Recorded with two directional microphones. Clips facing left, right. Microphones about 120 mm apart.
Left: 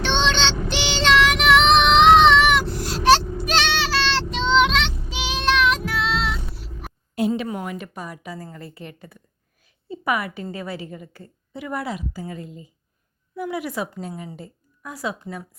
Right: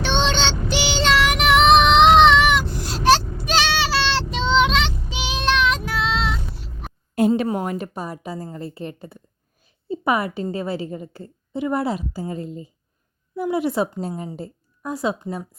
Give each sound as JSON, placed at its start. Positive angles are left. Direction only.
{"t": 0.3, "sound": "child singing", "side_deg": -5}
{"t": 7.2, "sound": "a woman's voice", "side_deg": -45}